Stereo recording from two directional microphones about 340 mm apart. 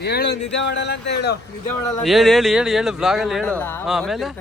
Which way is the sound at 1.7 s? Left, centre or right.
Centre.